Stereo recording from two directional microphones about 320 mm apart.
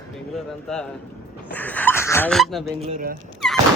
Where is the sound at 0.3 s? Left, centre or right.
Centre.